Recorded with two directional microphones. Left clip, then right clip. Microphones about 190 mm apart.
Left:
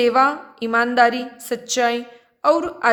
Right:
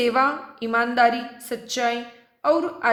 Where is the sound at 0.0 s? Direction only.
25° left (ahead or behind).